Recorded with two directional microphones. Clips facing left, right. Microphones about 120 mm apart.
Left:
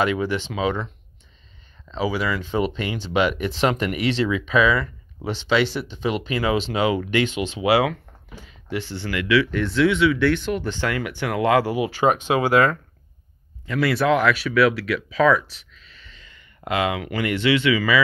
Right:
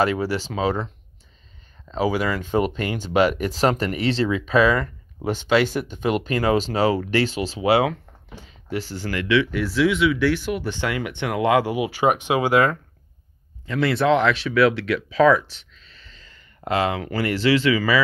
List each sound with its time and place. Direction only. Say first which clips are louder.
0.0 s speech: right 1 dB; 40° right (ahead or behind)
1.9 s speech: right 2 dB; 45° right (ahead or behind)
9.4 s speech: left 1 dB; 10° right (ahead or behind)
13.7 s speech: right 1 dB; 25° right (ahead or behind)
15.7 s a sound: left 1 dB; 30° right (ahead or behind)